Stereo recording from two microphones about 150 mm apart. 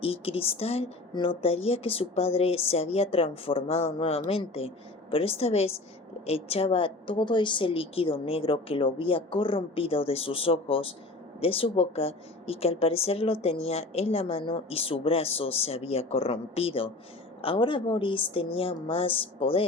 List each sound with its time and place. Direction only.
0.0 s a woman's voice: 40° left (ahead or behind)